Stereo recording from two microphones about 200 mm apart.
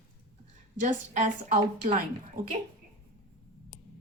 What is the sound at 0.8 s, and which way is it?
Speech, 40° right (ahead or behind).